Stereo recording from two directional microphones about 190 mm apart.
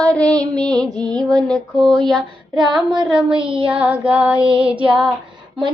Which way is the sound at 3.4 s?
30° right (ahead or behind).